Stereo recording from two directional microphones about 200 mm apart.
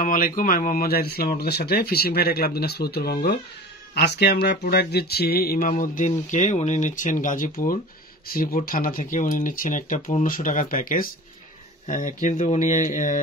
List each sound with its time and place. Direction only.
0.0 s speech: 45° left (ahead or behind)